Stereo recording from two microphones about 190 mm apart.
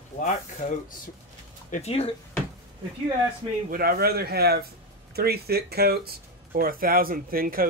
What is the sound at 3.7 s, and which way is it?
Speech, 55° right (ahead or behind).